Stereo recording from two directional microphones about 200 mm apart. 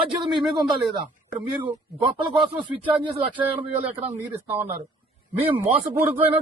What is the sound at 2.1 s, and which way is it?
Speech, 25° right (ahead or behind).